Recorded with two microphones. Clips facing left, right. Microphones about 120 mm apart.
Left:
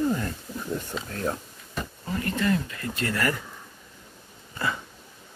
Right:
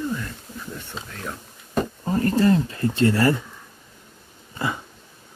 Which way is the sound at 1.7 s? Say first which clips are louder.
Right 9 dB; 40° right (ahead or behind).